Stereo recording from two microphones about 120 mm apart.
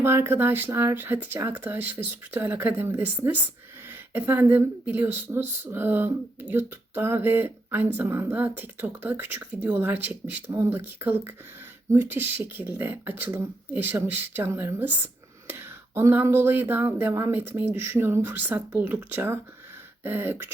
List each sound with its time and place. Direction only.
0.0 s speech: 20° right (ahead or behind)